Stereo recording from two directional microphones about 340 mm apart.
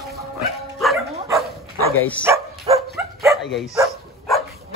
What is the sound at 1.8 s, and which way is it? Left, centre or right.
Bow-wow, left.